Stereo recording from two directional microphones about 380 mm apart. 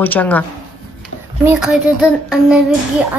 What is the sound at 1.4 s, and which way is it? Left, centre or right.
Speech, centre.